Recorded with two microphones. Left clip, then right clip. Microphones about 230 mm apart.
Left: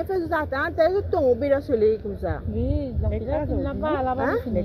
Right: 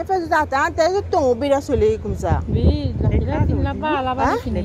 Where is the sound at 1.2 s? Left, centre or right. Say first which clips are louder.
Right 3 dB; right.